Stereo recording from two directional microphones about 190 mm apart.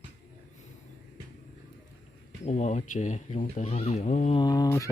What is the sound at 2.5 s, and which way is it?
Speech, 35° left (ahead or behind).